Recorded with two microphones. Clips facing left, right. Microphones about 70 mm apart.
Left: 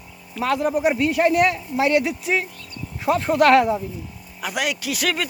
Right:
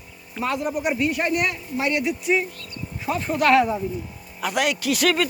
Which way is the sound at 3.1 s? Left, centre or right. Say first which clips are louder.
Left 4 dB; left.